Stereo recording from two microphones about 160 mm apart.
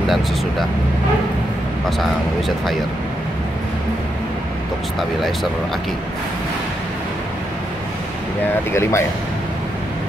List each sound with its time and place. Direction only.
1.9 s speech: centre (ahead or behind)
4.9 s speech: centre (ahead or behind)
8.7 s speech: 15° left (ahead or behind)